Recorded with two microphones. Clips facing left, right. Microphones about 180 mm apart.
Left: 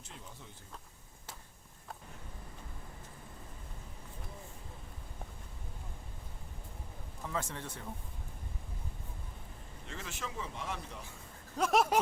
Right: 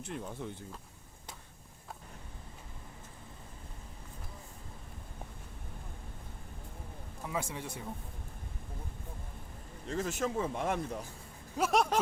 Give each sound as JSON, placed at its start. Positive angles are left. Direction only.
{"t": 0.0, "sound": "speech", "side_deg": -60}
{"t": 7.3, "sound": "speech", "side_deg": -10}
{"t": 9.8, "sound": "speech", "side_deg": -40}
{"t": 11.5, "sound": "speech", "side_deg": 0}